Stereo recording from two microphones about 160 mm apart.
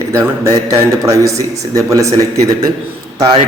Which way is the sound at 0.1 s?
20° right (ahead or behind).